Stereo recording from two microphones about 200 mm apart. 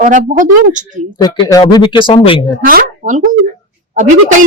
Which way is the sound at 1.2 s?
20° left (ahead or behind).